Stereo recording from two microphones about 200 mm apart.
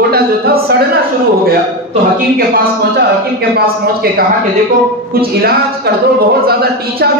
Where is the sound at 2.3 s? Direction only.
50° right (ahead or behind).